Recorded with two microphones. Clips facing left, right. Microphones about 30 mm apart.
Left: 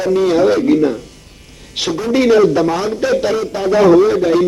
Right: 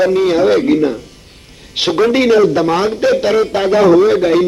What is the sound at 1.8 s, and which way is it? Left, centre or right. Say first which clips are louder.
Speech: right 5 dB; right.